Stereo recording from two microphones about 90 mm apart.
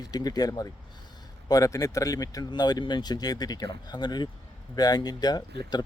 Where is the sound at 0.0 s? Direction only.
45° left (ahead or behind).